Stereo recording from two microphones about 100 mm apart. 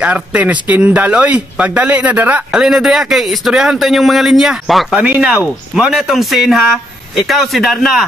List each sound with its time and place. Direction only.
0.0 s speech: 10° right (ahead or behind)
2.5 s a man's voice: 5° right (ahead or behind)